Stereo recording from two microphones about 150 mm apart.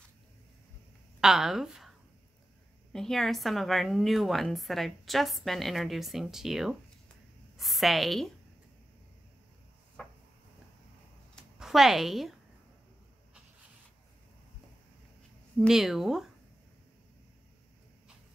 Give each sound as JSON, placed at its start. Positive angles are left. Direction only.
{"t": 1.2, "sound": "a woman's voice", "side_deg": -5}
{"t": 10.0, "sound": "a sound", "side_deg": 5}
{"t": 11.5, "sound": "a woman's voice", "side_deg": -5}
{"t": 15.6, "sound": "a woman's voice", "side_deg": 0}